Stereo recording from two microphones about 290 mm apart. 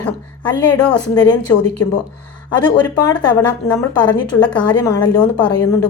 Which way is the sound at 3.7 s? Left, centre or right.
Centre.